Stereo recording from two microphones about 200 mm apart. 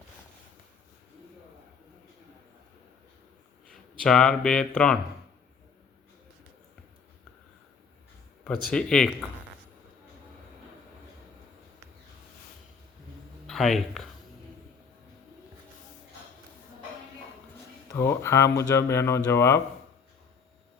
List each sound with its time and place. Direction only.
3.7 s speech: 5° left (ahead or behind)
8.7 s speech: 5° left (ahead or behind)
13.5 s speech: centre (ahead or behind)
17.9 s speech: 15° left (ahead or behind)